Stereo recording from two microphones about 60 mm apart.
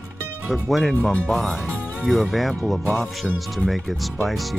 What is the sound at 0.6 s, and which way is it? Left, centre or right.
Speech, centre.